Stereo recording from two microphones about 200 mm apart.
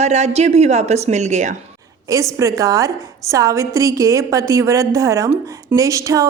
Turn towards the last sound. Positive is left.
turn(degrees=-15)  # may be behind; listen again after turning